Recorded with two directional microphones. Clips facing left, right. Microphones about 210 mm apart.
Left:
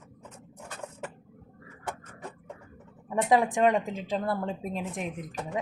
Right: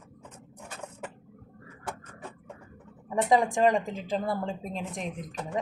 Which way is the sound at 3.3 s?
Centre (ahead or behind).